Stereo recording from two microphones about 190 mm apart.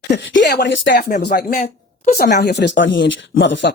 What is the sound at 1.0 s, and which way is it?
A woman's voice, 45° left (ahead or behind).